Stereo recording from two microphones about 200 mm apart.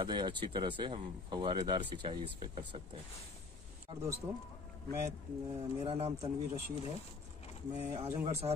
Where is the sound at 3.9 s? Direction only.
25° right (ahead or behind).